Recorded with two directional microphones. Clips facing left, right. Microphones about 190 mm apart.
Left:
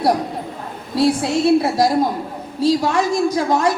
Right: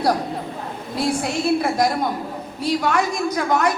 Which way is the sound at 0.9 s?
30° left (ahead or behind).